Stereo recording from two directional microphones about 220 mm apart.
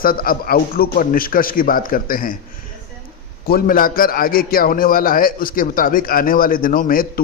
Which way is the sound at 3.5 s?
40° left (ahead or behind).